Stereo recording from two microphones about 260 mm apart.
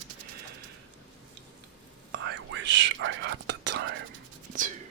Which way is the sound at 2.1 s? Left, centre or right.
Right.